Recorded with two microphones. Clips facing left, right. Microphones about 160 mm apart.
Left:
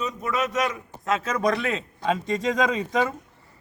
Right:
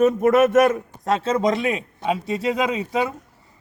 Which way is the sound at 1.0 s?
30° right (ahead or behind).